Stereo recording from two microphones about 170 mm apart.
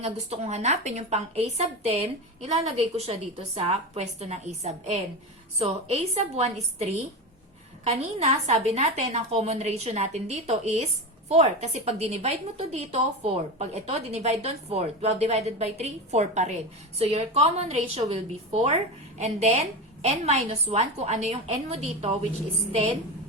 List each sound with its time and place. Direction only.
0.0 s a woman's voice: 40° right (ahead or behind)